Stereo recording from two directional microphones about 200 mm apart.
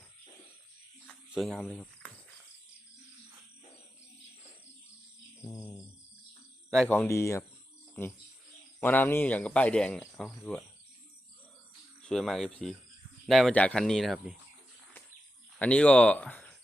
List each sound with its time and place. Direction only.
1.0 s cricket: centre (ahead or behind)
5.4 s mantra: 15° left (ahead or behind)
6.7 s speech: 5° left (ahead or behind)
12.0 s speech: centre (ahead or behind)
15.5 s speech: 5° left (ahead or behind)